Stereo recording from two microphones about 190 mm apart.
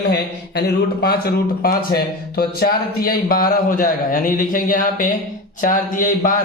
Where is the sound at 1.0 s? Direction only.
55° left (ahead or behind).